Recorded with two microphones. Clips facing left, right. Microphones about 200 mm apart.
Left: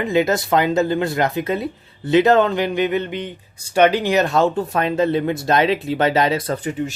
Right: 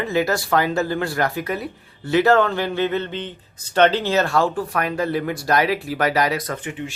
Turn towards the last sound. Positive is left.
turn(degrees=40)  # may be behind; listen again after turning